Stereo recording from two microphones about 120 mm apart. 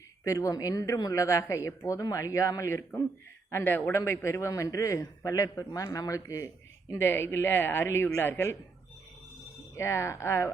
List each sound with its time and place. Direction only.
0.3 s speech: 25° left (ahead or behind)
9.7 s speech: 25° left (ahead or behind)